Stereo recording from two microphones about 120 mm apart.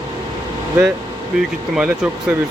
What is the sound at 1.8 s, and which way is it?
Speech, 10° right (ahead or behind).